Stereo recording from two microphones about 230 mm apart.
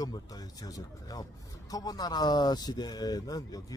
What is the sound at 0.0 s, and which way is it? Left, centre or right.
Speech, centre.